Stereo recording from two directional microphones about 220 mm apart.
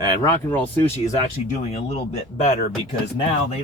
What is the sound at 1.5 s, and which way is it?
Speech, 30° left (ahead or behind).